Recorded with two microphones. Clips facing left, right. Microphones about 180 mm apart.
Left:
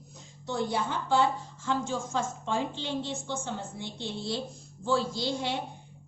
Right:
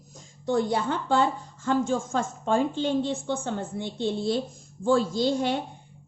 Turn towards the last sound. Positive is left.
turn(degrees=-50)  # may be behind; listen again after turning